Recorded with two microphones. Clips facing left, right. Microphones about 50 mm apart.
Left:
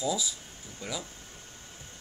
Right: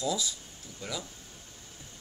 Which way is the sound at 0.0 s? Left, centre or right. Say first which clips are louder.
Left 1 dB; centre.